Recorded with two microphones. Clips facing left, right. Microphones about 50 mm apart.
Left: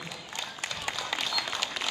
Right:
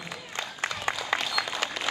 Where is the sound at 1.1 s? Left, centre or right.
Right.